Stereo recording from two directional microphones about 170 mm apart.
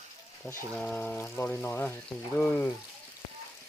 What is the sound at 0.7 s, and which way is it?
Speech, 5° left (ahead or behind).